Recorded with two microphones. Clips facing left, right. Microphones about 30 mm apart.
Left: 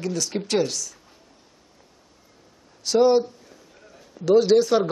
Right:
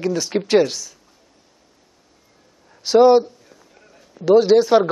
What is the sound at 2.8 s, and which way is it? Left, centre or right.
Speech, right.